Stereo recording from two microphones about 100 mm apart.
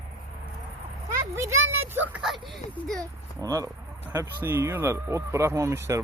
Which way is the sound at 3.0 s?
35° right (ahead or behind).